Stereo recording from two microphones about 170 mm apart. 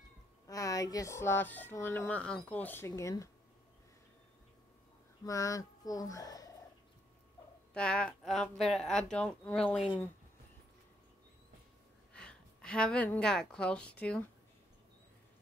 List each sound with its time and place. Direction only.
0.5 s speech: 20° left (ahead or behind)
5.2 s speech: 20° left (ahead or behind)
7.7 s speech: 5° left (ahead or behind)
12.1 s a woman's voice: 5° left (ahead or behind)